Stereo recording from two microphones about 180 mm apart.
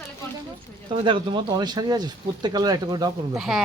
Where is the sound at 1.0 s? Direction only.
25° right (ahead or behind).